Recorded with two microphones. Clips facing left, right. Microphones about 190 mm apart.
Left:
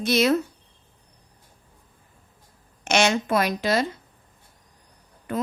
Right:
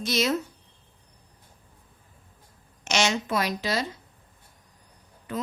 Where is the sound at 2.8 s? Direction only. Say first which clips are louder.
Left 4 dB; 55° left (ahead or behind).